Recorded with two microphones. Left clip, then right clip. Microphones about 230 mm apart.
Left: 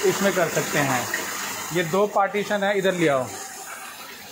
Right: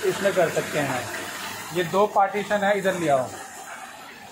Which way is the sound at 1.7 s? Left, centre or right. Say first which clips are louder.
Right 1 dB; left.